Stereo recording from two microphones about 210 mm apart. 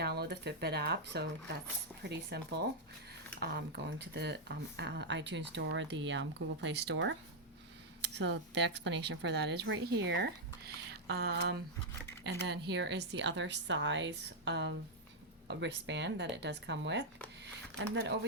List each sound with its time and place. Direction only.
0.0 s speech: 50° right (ahead or behind)